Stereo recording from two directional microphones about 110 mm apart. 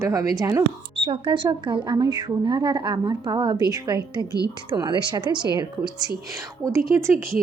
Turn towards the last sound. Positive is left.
turn(degrees=-25)  # may be behind; listen again after turning